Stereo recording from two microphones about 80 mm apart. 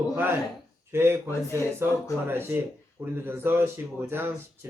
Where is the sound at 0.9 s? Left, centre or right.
Right.